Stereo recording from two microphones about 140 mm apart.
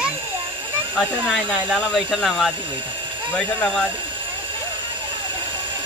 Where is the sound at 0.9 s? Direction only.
5° left (ahead or behind).